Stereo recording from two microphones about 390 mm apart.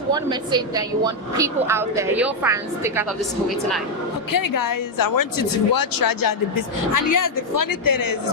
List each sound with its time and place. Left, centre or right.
0.1 s a woman's voice: centre
4.3 s speech: left